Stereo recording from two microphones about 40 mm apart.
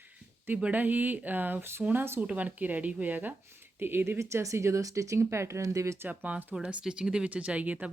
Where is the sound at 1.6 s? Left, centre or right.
Right.